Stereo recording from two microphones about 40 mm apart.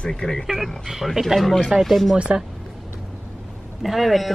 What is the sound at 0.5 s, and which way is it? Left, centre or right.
A man's voice, centre.